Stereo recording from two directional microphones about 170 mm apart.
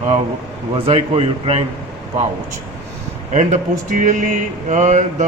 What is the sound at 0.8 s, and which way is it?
Speech, 35° right (ahead or behind).